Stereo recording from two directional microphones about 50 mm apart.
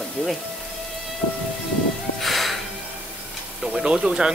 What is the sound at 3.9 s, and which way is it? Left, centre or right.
Speech, centre.